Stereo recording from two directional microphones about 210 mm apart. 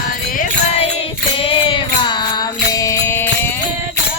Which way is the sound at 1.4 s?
25° left (ahead or behind).